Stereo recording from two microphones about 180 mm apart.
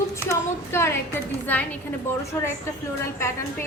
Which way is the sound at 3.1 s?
15° left (ahead or behind).